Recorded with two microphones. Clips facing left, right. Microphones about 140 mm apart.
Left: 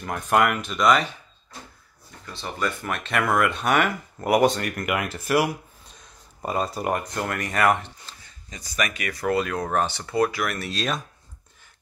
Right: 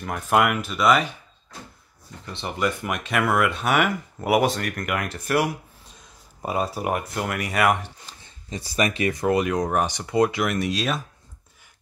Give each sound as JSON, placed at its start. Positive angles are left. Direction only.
{"t": 0.0, "sound": "speech", "side_deg": -5}
{"t": 2.2, "sound": "speech", "side_deg": -20}
{"t": 8.2, "sound": "speech", "side_deg": -30}
{"t": 10.7, "sound": "speech", "side_deg": -10}